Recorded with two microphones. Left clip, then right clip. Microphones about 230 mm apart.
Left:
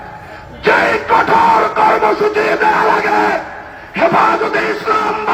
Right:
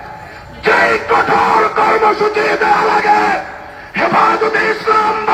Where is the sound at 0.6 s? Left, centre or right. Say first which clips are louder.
Even; left.